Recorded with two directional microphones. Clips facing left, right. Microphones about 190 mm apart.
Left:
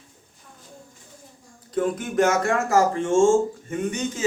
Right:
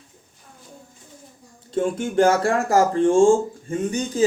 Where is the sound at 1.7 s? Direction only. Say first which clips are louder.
Right 2 dB; 30° right (ahead or behind).